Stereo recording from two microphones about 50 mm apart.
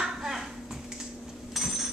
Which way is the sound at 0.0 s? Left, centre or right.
Centre.